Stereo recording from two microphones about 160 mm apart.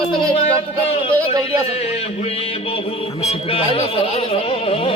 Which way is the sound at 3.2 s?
40° left (ahead or behind).